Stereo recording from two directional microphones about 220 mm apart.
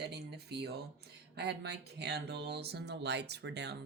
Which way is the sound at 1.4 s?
50° right (ahead or behind).